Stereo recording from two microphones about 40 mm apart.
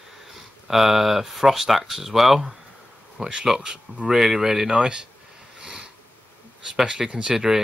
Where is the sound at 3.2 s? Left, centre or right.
Right.